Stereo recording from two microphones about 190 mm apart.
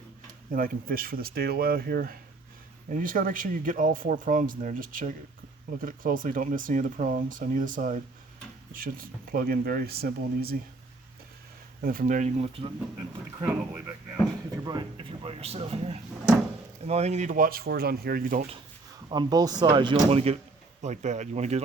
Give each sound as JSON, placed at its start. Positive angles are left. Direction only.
{"t": 0.5, "sound": "speech", "side_deg": -50}
{"t": 11.8, "sound": "speech", "side_deg": -50}
{"t": 13.4, "sound": "speech", "side_deg": -10}
{"t": 14.5, "sound": "speech", "side_deg": -20}
{"t": 19.0, "sound": "speech", "side_deg": -20}